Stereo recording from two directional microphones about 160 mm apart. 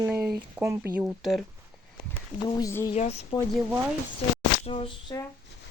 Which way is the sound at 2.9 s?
45° left (ahead or behind).